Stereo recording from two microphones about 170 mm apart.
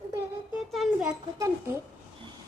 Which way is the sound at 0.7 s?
Centre (ahead or behind).